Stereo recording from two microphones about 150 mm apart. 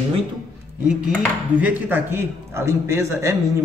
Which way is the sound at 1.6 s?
10° right (ahead or behind).